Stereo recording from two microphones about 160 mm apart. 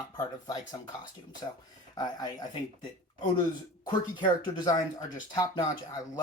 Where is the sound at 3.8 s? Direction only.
30° left (ahead or behind).